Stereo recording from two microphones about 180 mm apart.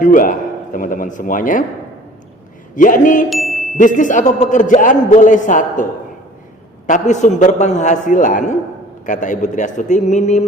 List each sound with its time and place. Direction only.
0.0 s a man's voice: 45° left (ahead or behind)
2.7 s a man's voice: 45° left (ahead or behind)
3.2 s ding: centre (ahead or behind)
3.8 s a man's voice: 45° left (ahead or behind)
6.8 s a man's voice: 40° left (ahead or behind)